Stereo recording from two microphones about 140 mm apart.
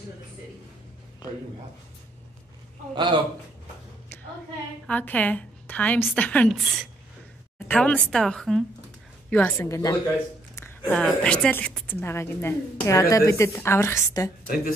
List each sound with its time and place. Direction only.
2.9 s a man's voice: 35° right (ahead or behind)
4.8 s a woman's voice: 10° left (ahead or behind)
6.5 s speech: centre (ahead or behind)
7.5 s a woman's voice: 10° left (ahead or behind)
10.9 s a woman's voice: 5° left (ahead or behind)